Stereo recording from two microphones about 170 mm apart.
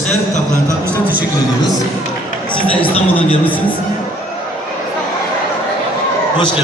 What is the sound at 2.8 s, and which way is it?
Speech, 30° left (ahead or behind).